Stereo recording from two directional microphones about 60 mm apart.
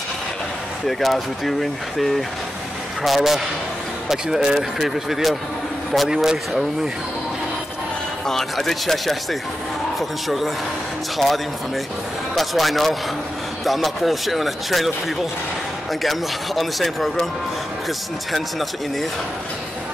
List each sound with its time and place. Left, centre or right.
0.8 s a man's voice: centre
8.3 s a man's voice: centre